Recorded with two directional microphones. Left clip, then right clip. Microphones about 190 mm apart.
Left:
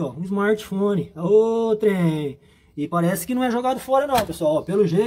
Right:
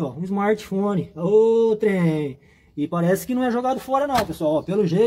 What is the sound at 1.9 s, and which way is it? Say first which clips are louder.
Speech: right 1 dB; 60° left (ahead or behind).